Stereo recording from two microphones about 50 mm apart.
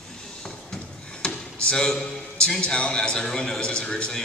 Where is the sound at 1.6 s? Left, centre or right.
Centre.